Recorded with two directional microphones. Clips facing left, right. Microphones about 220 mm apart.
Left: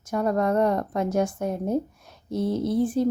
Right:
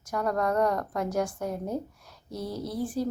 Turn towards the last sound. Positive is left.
turn(degrees=25)  # may be behind; listen again after turning